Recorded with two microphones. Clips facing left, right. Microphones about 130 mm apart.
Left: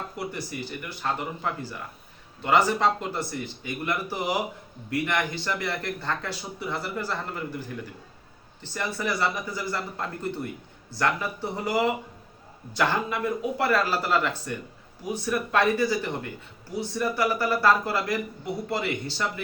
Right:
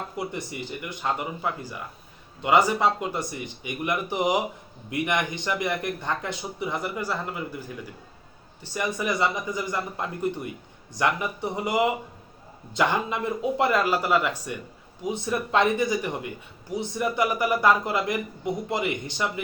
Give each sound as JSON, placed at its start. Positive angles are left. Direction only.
{"t": 0.3, "sound": "speech", "side_deg": -20}
{"t": 8.6, "sound": "a man's voice", "side_deg": -15}